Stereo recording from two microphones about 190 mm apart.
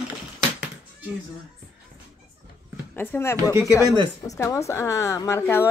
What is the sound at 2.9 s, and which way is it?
A woman's voice, 10° left (ahead or behind).